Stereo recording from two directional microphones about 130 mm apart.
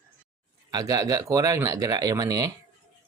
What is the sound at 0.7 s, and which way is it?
Speech, 30° right (ahead or behind).